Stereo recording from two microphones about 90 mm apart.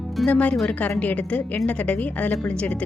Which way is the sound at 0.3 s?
15° left (ahead or behind).